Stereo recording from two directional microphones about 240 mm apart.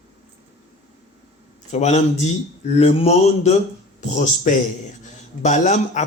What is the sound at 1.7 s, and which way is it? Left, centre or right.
Speech, left.